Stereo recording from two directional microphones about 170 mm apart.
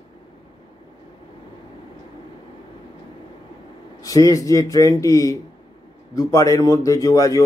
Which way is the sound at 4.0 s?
20° left (ahead or behind).